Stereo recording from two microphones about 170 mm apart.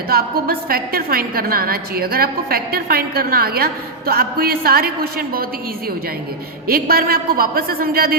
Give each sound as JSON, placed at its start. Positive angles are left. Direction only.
{"t": 0.1, "sound": "a woman's voice", "side_deg": -60}
{"t": 6.7, "sound": "a woman's voice", "side_deg": -60}